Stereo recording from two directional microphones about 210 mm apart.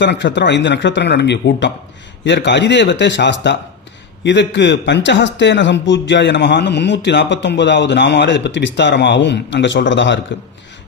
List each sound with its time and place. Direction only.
0.0 s a man's voice: 55° left (ahead or behind)